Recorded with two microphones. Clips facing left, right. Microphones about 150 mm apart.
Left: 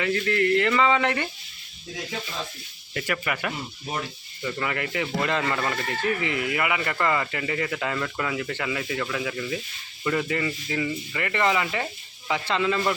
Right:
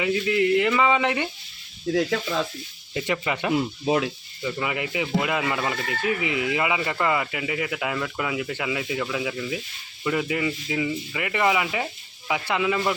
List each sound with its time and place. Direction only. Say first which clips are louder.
0.0 s speech: right 2 dB; 15° right (ahead or behind)
1.9 s speech: right 11 dB; 70° right (ahead or behind)
2.9 s speech: right 2 dB; 20° right (ahead or behind)
3.5 s speech: right 10 dB; 90° right
4.4 s speech: right 1 dB; 15° right (ahead or behind)